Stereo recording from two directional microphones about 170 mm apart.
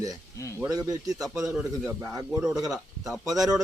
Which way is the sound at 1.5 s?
5° right (ahead or behind).